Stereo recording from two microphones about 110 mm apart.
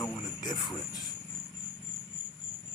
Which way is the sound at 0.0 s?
40° left (ahead or behind).